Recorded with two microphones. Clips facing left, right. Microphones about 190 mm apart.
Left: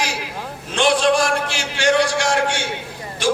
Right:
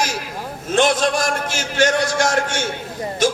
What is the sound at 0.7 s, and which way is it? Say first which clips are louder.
A man's voice: even; 45° right (ahead or behind).